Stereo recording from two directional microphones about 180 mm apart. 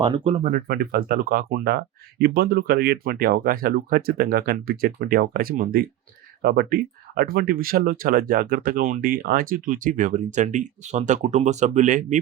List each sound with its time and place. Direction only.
0.0 s speech: 30° right (ahead or behind)
0.5 s speech: 55° right (ahead or behind)